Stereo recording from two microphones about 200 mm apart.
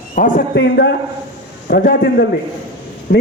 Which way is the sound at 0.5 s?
60° left (ahead or behind).